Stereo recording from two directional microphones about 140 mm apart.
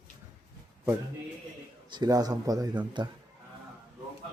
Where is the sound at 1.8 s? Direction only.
30° right (ahead or behind).